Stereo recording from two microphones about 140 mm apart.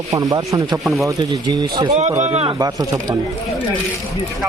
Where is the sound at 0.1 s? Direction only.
25° right (ahead or behind).